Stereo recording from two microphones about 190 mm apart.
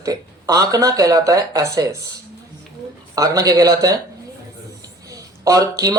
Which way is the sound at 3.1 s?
20° right (ahead or behind).